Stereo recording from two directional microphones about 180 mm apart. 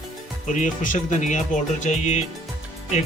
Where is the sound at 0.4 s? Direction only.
45° left (ahead or behind).